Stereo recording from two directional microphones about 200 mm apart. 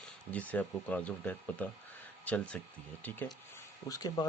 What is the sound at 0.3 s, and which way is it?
Speech, 10° left (ahead or behind).